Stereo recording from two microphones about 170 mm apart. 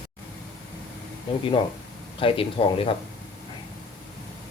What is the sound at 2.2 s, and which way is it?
Speech, 30° left (ahead or behind).